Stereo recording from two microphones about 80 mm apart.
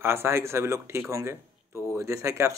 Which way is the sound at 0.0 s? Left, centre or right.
Right.